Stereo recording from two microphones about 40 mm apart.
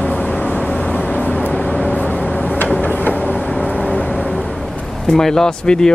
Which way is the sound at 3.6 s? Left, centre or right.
Left.